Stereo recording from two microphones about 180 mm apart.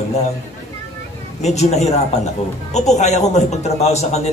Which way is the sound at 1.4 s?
40° left (ahead or behind).